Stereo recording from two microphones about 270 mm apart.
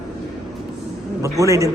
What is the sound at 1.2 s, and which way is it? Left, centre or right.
Speech, centre.